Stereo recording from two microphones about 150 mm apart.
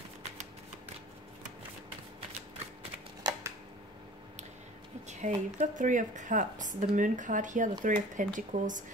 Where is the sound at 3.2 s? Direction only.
20° right (ahead or behind).